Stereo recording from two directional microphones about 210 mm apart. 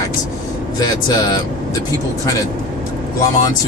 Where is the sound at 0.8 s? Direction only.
20° left (ahead or behind).